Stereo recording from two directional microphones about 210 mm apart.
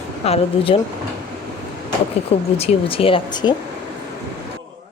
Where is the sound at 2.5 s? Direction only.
30° left (ahead or behind).